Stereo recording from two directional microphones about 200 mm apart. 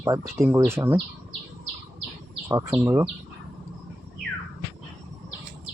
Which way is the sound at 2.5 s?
15° right (ahead or behind).